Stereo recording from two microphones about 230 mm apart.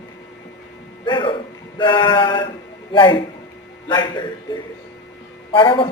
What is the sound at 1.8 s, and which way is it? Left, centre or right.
A man's voice, centre.